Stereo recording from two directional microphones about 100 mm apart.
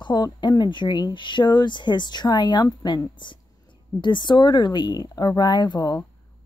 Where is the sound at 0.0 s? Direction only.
50° left (ahead or behind).